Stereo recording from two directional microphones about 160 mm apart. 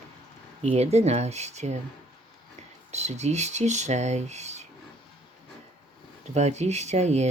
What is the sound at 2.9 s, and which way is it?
Speech, 45° right (ahead or behind).